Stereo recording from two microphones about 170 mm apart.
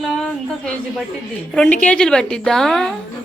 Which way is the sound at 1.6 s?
5° left (ahead or behind).